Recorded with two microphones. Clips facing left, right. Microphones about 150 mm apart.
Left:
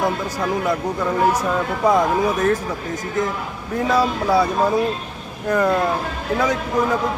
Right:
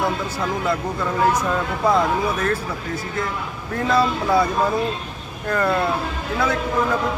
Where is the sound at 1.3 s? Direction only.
10° left (ahead or behind).